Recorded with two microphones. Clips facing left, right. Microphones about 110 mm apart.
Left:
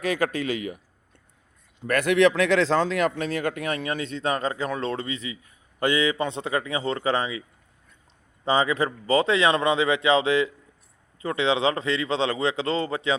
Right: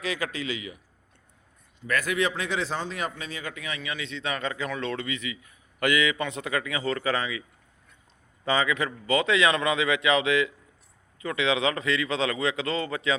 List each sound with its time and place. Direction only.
0.0 s a man's voice: 50° left (ahead or behind)
1.8 s a man's voice: 65° left (ahead or behind); by 7.4 s 30° left (ahead or behind)
8.4 s a man's voice: 30° left (ahead or behind)